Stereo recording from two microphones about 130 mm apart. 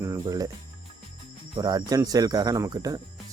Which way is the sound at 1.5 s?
30° right (ahead or behind).